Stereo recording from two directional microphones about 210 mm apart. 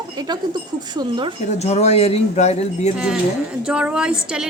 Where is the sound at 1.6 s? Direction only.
30° left (ahead or behind).